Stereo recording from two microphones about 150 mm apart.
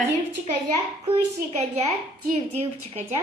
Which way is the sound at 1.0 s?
45° right (ahead or behind).